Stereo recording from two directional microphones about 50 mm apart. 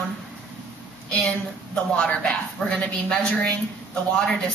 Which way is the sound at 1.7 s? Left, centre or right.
Centre.